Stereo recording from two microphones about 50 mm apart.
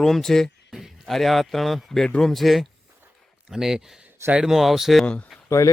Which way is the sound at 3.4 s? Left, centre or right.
Centre.